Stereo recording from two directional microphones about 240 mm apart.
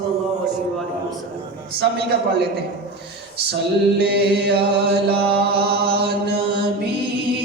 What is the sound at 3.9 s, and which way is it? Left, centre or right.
Chant, right.